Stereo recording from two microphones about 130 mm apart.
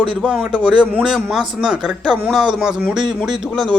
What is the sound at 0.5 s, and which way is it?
Speech, 35° right (ahead or behind).